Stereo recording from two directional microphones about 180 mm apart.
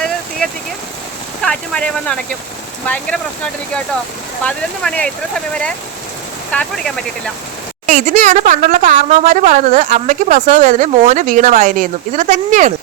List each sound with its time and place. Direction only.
1.4 s speech: 5° left (ahead or behind)
4.4 s speech: 5° left (ahead or behind)
6.5 s speech: 5° left (ahead or behind)
7.9 s speech: 45° right (ahead or behind)